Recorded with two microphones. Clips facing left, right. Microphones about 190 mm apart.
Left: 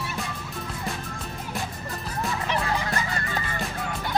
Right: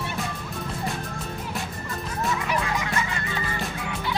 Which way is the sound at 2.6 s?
35° left (ahead or behind).